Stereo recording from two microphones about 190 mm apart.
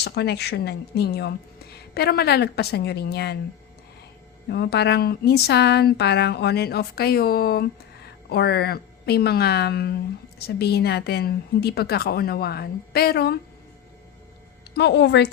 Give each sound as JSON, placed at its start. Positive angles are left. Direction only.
{"t": 0.0, "sound": "a woman's voice", "side_deg": 60}
{"t": 4.4, "sound": "a woman's voice", "side_deg": 60}
{"t": 14.8, "sound": "a woman's voice", "side_deg": 65}